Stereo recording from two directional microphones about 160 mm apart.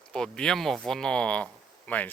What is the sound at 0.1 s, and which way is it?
Speech, 5° left (ahead or behind).